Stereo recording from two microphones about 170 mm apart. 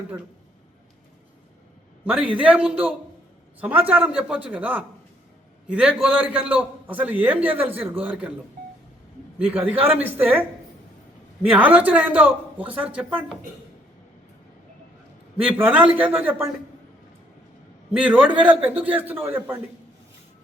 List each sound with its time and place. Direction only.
2.0 s a man's voice: 10° right (ahead or behind)
9.5 s a man's voice: 10° right (ahead or behind)
11.4 s a man's voice: 10° right (ahead or behind)
15.4 s a man's voice: 10° right (ahead or behind)
17.9 s a man's voice: 10° right (ahead or behind)